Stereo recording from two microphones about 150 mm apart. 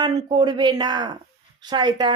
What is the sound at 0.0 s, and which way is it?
Speech, 25° right (ahead or behind).